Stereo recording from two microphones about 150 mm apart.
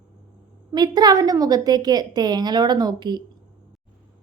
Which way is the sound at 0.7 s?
25° right (ahead or behind).